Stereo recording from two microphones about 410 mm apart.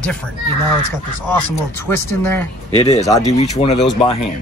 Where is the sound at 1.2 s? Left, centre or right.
Left.